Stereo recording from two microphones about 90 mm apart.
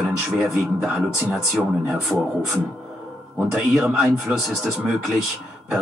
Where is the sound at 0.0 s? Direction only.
5° right (ahead or behind).